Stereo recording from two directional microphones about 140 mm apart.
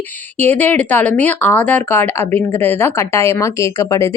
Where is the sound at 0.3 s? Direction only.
15° left (ahead or behind).